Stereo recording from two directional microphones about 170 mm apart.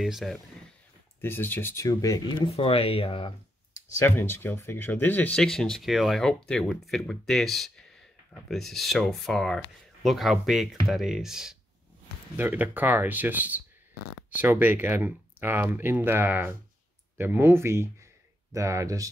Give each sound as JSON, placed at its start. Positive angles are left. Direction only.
{"t": 0.0, "sound": "speech", "side_deg": 0}
{"t": 1.2, "sound": "speech", "side_deg": 15}
{"t": 4.0, "sound": "speech", "side_deg": 15}